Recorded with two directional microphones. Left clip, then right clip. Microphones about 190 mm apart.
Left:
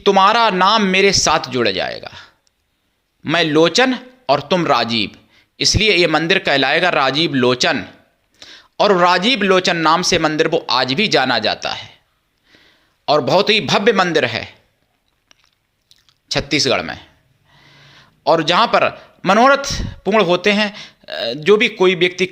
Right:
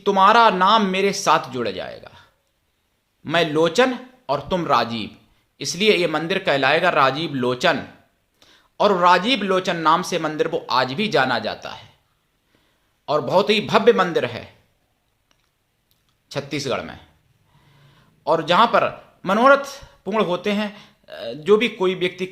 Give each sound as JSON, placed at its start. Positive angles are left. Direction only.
{"t": 0.0, "sound": "a man's voice", "side_deg": 25}
{"t": 16.0, "sound": "a man's voice", "side_deg": 30}